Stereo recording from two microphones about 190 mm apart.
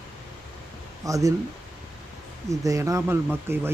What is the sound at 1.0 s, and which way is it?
Speech, 15° right (ahead or behind).